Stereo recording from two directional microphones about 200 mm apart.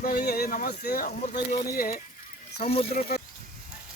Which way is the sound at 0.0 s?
50° left (ahead or behind).